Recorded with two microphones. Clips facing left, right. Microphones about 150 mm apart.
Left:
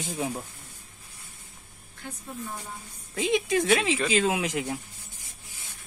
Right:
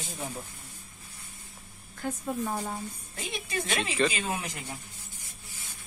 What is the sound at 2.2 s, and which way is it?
Speech, 65° right (ahead or behind).